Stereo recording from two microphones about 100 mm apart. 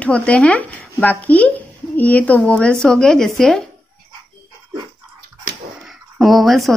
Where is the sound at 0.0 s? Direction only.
15° left (ahead or behind).